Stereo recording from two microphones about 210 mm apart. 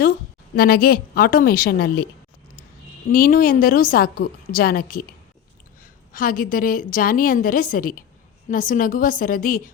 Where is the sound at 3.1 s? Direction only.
40° left (ahead or behind).